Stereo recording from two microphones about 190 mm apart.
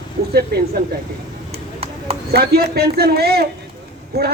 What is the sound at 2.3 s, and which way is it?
Speech, 55° right (ahead or behind).